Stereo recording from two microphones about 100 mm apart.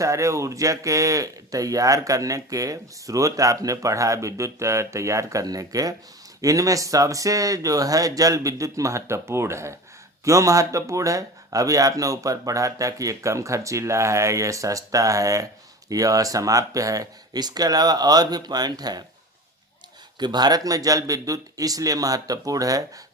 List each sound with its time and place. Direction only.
0.0 s speech: 30° right (ahead or behind)
20.1 s speech: 45° right (ahead or behind)